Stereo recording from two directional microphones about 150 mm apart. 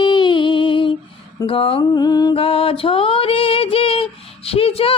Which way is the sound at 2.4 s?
40° left (ahead or behind).